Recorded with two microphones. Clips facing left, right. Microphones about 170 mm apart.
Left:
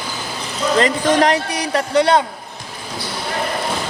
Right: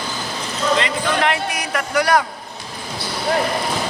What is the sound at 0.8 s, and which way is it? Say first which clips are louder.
A man's voice: left 5 dB; 40° left (ahead or behind).